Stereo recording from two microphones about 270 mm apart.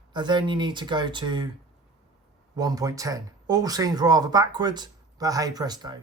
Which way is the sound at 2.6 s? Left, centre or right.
Centre.